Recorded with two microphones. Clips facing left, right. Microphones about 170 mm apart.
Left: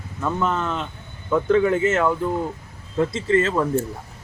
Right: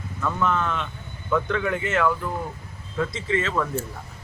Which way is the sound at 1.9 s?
25° left (ahead or behind).